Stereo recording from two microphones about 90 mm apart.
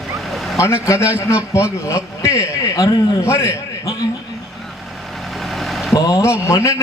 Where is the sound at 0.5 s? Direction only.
30° left (ahead or behind).